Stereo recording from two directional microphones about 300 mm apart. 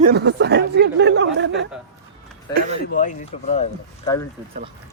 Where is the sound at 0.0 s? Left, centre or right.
Right.